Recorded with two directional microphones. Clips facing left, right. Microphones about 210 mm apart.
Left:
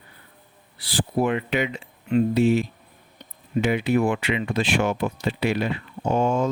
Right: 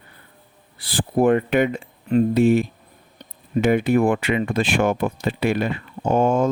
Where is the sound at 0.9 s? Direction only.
50° right (ahead or behind).